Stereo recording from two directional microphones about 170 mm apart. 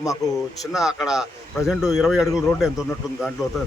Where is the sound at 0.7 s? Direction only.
Centre (ahead or behind).